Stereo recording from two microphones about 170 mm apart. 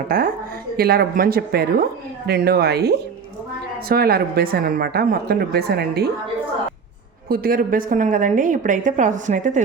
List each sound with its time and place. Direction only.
0.1 s a woman's voice: 55° right (ahead or behind)
7.3 s a woman's voice: 60° right (ahead or behind)